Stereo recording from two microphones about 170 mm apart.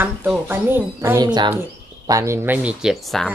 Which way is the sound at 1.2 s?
25° right (ahead or behind).